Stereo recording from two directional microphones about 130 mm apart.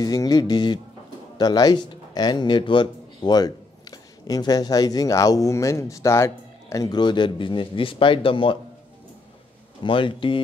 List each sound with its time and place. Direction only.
0.0 s a man's voice: 30° left (ahead or behind)
9.8 s speech: 40° left (ahead or behind)